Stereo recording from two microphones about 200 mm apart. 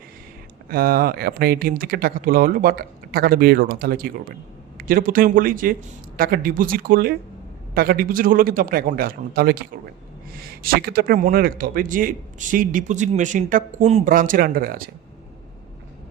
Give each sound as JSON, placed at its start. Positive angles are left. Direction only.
{"t": 0.7, "sound": "speech", "side_deg": -50}